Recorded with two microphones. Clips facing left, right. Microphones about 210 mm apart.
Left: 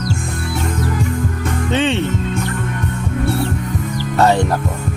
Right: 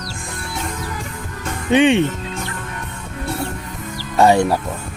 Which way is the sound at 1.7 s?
15° right (ahead or behind).